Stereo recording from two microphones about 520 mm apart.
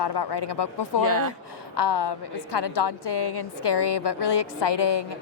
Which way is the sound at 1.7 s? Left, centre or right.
Left.